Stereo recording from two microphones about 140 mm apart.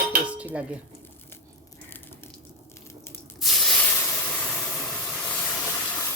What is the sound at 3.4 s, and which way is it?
Hiss, centre (ahead or behind).